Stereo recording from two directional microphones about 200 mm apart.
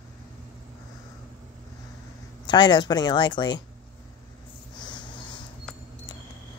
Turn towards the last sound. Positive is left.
turn(degrees=25)  # may be behind; listen again after turning